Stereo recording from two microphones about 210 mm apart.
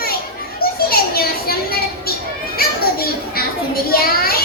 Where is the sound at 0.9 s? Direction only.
45° left (ahead or behind).